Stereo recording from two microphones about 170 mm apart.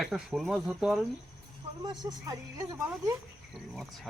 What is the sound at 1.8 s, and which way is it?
A man's voice, 25° right (ahead or behind).